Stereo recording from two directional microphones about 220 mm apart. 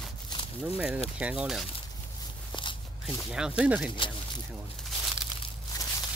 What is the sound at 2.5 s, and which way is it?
Walk, 20° left (ahead or behind).